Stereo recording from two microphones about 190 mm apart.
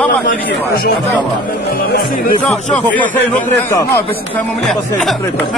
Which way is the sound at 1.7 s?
50° left (ahead or behind).